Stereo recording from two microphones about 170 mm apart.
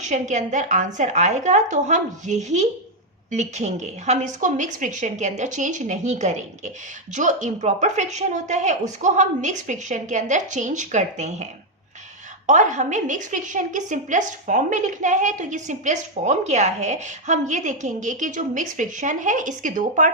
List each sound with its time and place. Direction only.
0.0 s a woman's voice: 45° right (ahead or behind)
12.5 s a woman's voice: 45° right (ahead or behind)